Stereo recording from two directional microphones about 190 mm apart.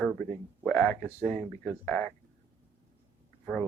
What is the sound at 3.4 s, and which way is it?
Speech, 5° right (ahead or behind).